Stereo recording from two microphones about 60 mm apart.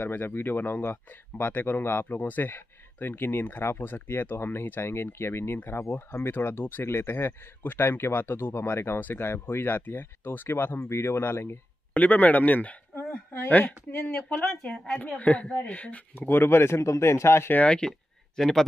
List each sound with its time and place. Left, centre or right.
0.0 s speech: left
2.1 s speech: left
11.9 s speech: left
14.4 s speech: centre
15.1 s speech: left
16.2 s speech: left
17.6 s speech: centre